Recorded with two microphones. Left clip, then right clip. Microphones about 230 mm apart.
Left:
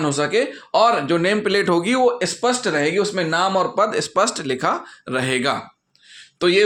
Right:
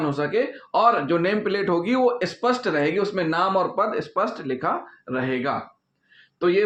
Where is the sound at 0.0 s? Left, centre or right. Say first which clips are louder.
Left 4 dB; left.